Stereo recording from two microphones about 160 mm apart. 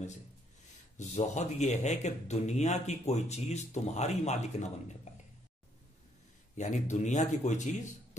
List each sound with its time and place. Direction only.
0.9 s a man's voice: 45° left (ahead or behind)
5.1 s a sound: 45° left (ahead or behind)
6.5 s a man's voice: 50° left (ahead or behind)